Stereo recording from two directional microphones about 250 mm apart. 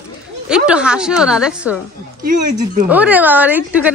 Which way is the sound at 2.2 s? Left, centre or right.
Right.